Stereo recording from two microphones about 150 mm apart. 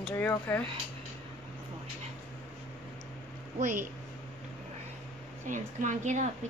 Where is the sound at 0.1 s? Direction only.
15° left (ahead or behind).